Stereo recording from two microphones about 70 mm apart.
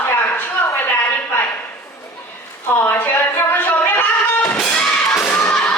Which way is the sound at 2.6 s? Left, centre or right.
Left.